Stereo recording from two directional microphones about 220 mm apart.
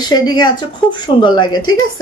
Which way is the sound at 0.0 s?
20° left (ahead or behind).